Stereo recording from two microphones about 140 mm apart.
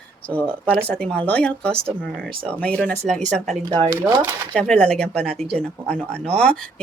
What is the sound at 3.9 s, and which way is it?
Speech, 25° right (ahead or behind).